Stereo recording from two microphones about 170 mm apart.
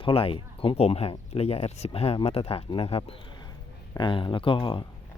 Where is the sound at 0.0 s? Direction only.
35° left (ahead or behind).